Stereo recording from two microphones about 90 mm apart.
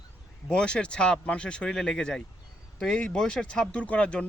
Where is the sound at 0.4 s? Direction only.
10° left (ahead or behind).